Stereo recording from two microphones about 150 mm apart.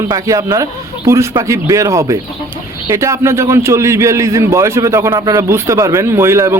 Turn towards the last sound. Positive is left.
turn(degrees=-15)  # may be behind; listen again after turning